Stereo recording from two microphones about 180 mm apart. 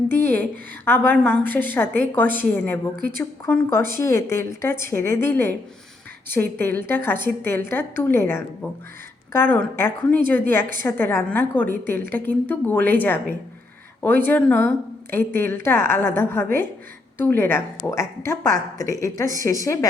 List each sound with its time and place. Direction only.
0.9 s a woman's voice: 10° left (ahead or behind)